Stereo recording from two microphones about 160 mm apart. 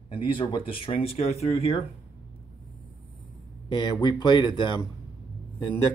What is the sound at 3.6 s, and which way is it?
Speech, 30° left (ahead or behind).